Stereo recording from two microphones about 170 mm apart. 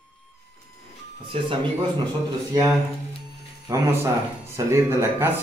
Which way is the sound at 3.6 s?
15° right (ahead or behind).